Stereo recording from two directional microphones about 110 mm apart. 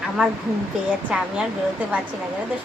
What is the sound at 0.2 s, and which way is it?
Speech, 10° right (ahead or behind).